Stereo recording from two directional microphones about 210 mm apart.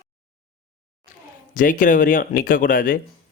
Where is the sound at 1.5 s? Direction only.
40° left (ahead or behind).